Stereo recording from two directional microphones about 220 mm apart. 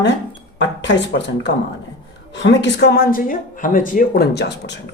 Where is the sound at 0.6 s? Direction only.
55° left (ahead or behind).